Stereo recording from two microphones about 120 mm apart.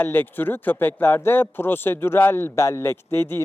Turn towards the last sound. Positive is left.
turn(degrees=20)  # may be behind; listen again after turning